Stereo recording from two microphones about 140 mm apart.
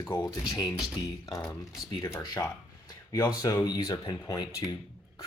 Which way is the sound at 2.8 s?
30° left (ahead or behind).